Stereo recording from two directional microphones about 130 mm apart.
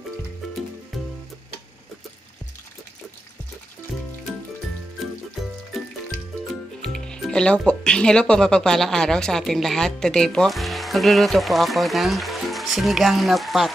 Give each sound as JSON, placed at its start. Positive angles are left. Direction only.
{"t": 0.9, "sound": "music", "side_deg": 0}
{"t": 6.8, "sound": "speech", "side_deg": 5}